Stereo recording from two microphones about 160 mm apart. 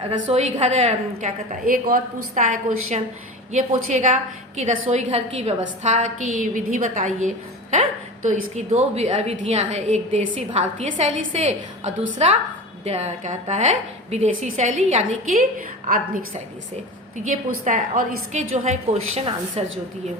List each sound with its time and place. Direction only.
0.3 s a woman's voice: 45° right (ahead or behind)
1.6 s a woman's voice: 60° right (ahead or behind)
17.2 s a woman's voice: 55° right (ahead or behind)